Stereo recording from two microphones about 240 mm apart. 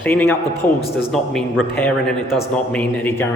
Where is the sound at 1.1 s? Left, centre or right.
Centre.